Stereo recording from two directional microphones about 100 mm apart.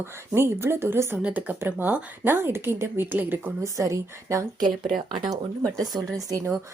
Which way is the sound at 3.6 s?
30° right (ahead or behind).